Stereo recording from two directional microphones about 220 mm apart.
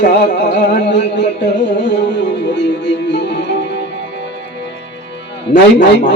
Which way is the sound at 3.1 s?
50° left (ahead or behind).